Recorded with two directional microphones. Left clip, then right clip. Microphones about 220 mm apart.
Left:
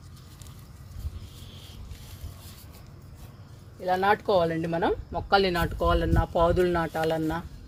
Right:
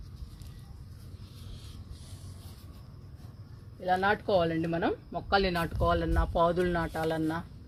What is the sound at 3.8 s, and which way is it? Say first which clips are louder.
Speech: left 4 dB; 15° left (ahead or behind).